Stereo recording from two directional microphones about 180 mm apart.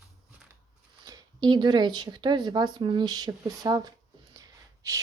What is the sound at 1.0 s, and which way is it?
Speech, 20° right (ahead or behind).